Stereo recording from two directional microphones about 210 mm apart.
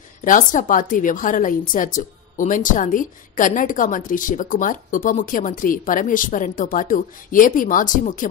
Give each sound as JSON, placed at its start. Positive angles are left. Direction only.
{"t": 0.2, "sound": "a woman's voice", "side_deg": 40}